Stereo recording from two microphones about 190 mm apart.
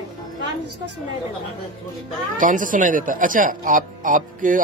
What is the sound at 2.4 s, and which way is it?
Speech, 45° right (ahead or behind).